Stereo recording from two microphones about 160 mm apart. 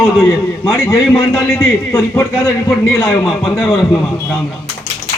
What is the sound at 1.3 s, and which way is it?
A man's voice, 5° left (ahead or behind).